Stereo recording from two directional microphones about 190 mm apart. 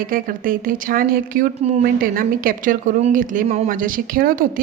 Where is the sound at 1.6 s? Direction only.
35° right (ahead or behind).